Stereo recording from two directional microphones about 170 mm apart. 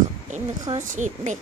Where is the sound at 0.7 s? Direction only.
45° right (ahead or behind).